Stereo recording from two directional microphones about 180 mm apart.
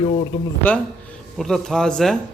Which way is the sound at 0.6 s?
5° left (ahead or behind).